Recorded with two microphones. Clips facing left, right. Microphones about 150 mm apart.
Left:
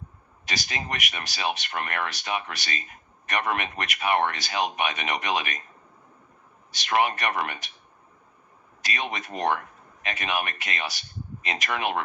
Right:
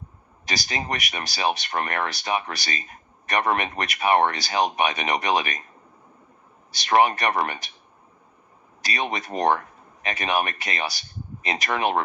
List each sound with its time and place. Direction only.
0.4 s speech: 35° right (ahead or behind)
6.7 s speech: 35° right (ahead or behind)
8.8 s speech: 35° right (ahead or behind)